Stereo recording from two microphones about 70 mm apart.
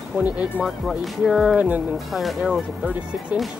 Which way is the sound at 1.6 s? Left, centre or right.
Right.